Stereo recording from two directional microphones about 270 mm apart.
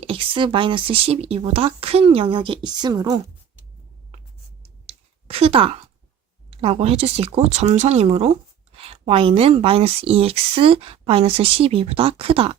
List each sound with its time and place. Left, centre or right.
0.0 s speech: centre
4.9 s a sound: right
6.5 s speech: right